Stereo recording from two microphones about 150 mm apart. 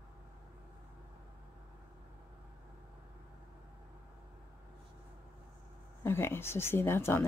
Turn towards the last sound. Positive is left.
turn(degrees=15)  # may be behind; listen again after turning